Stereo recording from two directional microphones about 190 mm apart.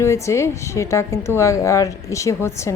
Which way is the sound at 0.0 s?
15° left (ahead or behind).